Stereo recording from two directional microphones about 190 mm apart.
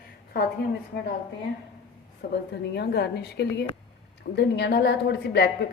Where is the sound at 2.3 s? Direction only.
60° left (ahead or behind).